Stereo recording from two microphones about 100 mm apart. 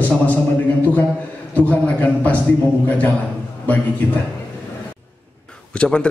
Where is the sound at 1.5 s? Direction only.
15° left (ahead or behind).